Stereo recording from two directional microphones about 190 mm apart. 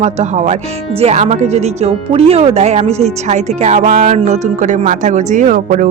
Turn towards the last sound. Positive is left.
turn(degrees=-40)  # may be behind; listen again after turning